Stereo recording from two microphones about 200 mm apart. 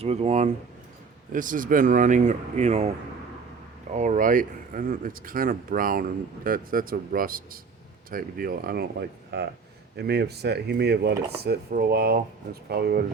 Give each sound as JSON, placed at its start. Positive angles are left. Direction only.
{"t": 0.0, "sound": "speech", "side_deg": -30}
{"t": 3.9, "sound": "speech", "side_deg": -40}
{"t": 9.9, "sound": "cutlery", "side_deg": -55}
{"t": 12.6, "sound": "speech", "side_deg": -50}